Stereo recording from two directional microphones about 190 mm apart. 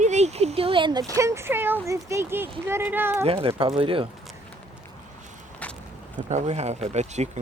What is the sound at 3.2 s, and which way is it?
Speech, 30° right (ahead or behind).